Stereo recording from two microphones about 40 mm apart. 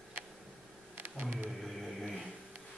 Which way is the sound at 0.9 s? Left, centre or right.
Right.